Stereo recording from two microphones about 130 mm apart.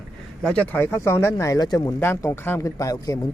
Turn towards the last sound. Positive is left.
turn(degrees=25)  # may be behind; listen again after turning